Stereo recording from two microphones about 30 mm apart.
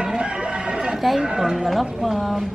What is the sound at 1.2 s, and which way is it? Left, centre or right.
Speech, right.